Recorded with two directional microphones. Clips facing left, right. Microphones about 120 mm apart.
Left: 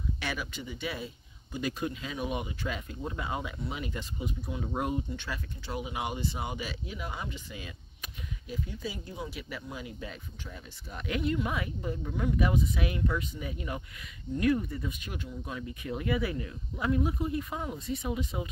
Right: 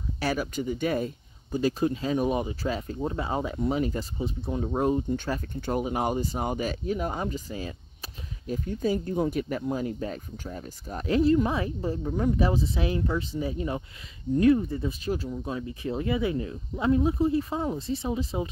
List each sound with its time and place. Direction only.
0.2 s speech: 40° right (ahead or behind)